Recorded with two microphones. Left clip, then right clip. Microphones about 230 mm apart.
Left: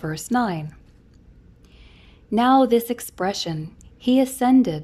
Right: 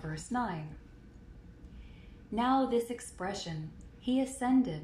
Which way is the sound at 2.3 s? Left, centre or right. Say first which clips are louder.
Left 13 dB; left.